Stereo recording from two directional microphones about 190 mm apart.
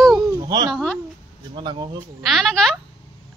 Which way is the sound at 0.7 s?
Centre (ahead or behind).